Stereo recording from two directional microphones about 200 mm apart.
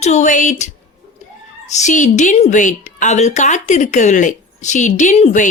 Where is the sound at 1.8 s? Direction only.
35° left (ahead or behind).